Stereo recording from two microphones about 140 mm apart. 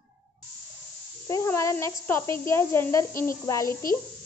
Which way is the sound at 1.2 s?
20° left (ahead or behind).